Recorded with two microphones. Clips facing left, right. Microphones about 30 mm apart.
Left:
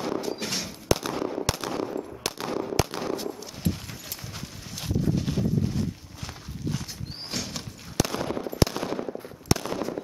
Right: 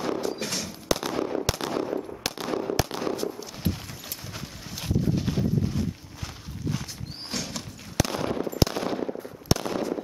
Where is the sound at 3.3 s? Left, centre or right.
Centre.